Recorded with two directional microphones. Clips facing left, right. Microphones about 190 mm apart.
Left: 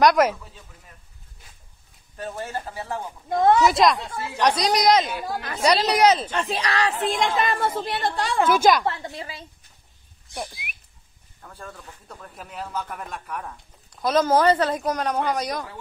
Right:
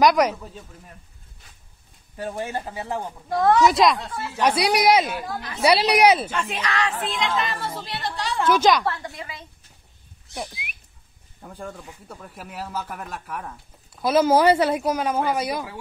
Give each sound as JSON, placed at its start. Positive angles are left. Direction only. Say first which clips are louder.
{"t": 0.0, "sound": "whistling", "louder": "even", "side_deg": 0}
{"t": 2.1, "sound": "speech", "louder": "right 2 dB", "side_deg": -15}
{"t": 3.3, "sound": "a woman's voice", "louder": "left 1 dB", "side_deg": 20}
{"t": 3.6, "sound": "whistling", "louder": "right 1 dB", "side_deg": 0}
{"t": 4.4, "sound": "speech", "louder": "right 1 dB", "side_deg": -10}
{"t": 6.3, "sound": "a woman's voice", "louder": "left 1 dB", "side_deg": 35}
{"t": 8.5, "sound": "a woman's voice", "louder": "right 1 dB", "side_deg": 10}
{"t": 8.8, "sound": "a woman's voice", "louder": "even", "side_deg": 20}
{"t": 10.3, "sound": "whistling", "louder": "even", "side_deg": 0}
{"t": 11.4, "sound": "speech", "louder": "right 4 dB", "side_deg": -15}